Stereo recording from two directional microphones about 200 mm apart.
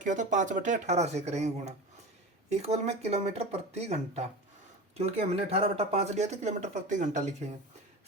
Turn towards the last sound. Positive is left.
turn(degrees=-35)  # may be behind; listen again after turning